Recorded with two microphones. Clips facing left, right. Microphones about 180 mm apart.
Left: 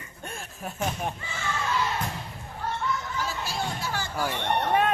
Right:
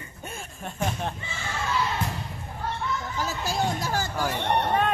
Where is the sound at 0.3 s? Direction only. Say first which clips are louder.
Left 1 dB; centre (ahead or behind).